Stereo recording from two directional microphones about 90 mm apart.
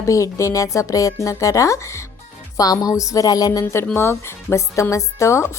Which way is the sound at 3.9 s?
25° left (ahead or behind).